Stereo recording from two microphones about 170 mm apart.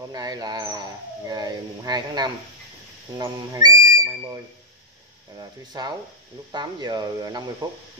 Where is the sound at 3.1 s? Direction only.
25° right (ahead or behind).